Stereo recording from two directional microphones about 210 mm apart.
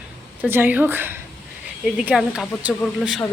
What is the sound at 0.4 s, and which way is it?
Speech, 10° right (ahead or behind).